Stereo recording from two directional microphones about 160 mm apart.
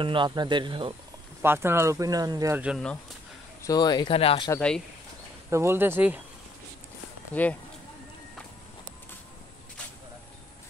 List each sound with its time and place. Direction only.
0.0 s speech: 30° right (ahead or behind)
1.4 s speech: 15° right (ahead or behind)
3.6 s speech: 25° left (ahead or behind)
4.6 s speech: 5° left (ahead or behind)
5.5 s speech: 15° right (ahead or behind)
7.3 s speech: 10° left (ahead or behind)